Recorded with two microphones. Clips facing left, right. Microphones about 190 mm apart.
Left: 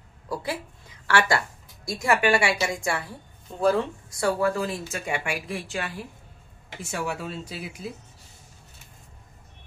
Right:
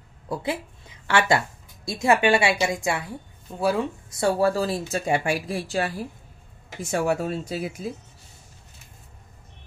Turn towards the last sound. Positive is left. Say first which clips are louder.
# right 7 dB
turn(degrees=-45)  # may be behind; listen again after turning